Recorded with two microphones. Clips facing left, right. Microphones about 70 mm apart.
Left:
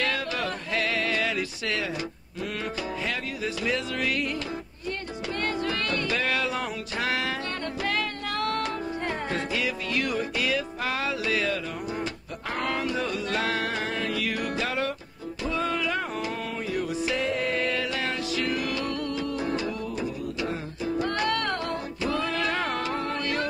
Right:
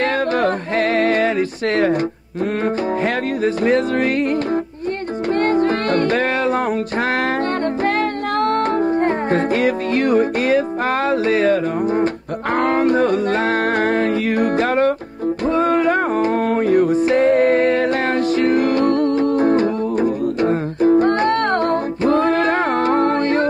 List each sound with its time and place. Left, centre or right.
0.0 s music: right
3.4 s music: right
5.3 s music: right
8.4 s music: right